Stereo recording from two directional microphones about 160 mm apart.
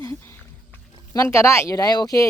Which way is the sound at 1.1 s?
20° left (ahead or behind).